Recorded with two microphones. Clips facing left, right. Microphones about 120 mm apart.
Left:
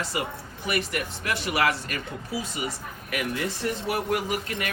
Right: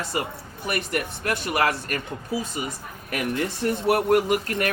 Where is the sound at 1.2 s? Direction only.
50° right (ahead or behind).